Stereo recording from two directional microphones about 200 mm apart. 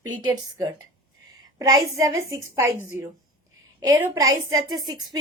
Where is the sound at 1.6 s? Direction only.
15° right (ahead or behind).